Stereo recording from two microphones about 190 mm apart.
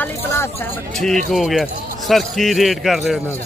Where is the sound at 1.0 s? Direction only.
Centre (ahead or behind).